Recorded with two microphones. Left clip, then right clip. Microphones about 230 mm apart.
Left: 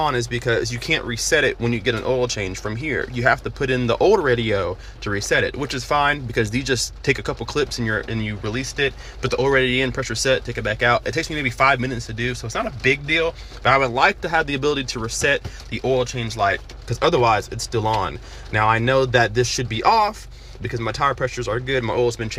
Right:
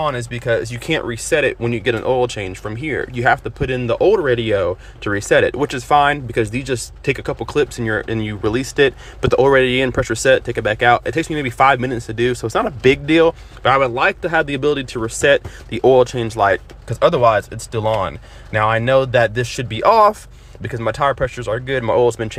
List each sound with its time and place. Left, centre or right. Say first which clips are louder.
0.0 s speech: even; centre; by 13.3 s right
13.6 s speech: right 1 dB; centre